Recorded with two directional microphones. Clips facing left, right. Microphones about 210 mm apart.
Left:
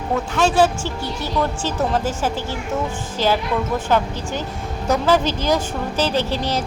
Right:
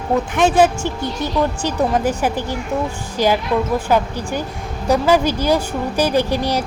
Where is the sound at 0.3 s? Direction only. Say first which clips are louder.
Right 2 dB; 20° right (ahead or behind).